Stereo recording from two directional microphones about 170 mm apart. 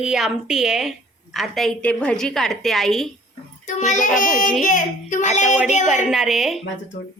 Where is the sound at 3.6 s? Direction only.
45° left (ahead or behind).